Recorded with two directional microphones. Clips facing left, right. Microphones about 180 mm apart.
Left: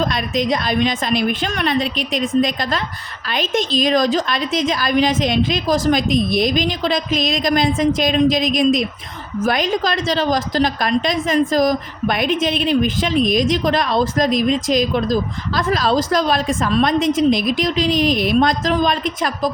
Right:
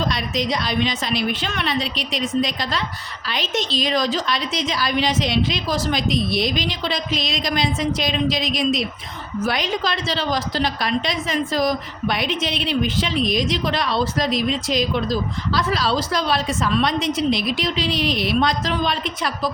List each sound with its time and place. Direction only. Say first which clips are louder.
0.0 s a woman's voice: left 4 dB; 50° left (ahead or behind)